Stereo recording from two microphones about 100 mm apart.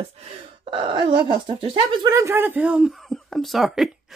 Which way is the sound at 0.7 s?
50° right (ahead or behind).